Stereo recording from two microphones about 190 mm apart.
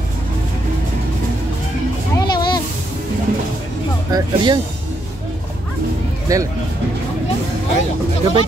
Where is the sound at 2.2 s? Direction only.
20° left (ahead or behind).